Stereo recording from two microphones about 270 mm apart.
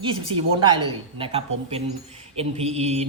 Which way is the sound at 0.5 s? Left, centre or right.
Centre.